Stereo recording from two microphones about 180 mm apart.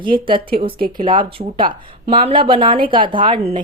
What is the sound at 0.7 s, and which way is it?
Speech, 55° right (ahead or behind).